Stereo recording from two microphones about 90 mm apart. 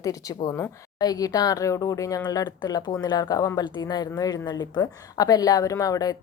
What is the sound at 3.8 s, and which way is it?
A woman's voice, 45° left (ahead or behind).